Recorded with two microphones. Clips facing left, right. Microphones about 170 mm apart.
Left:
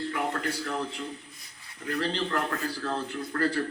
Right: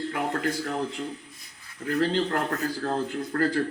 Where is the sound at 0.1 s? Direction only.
45° right (ahead or behind).